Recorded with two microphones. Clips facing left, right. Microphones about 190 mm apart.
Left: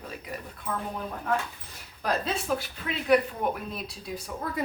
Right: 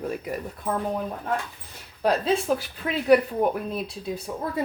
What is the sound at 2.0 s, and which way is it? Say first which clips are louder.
Speech: right 6 dB; 30° right (ahead or behind).